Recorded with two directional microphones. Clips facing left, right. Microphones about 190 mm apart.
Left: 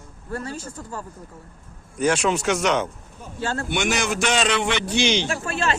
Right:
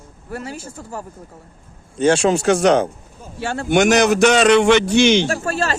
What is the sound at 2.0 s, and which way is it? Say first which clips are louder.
A man's voice: right 6 dB; 30° right (ahead or behind).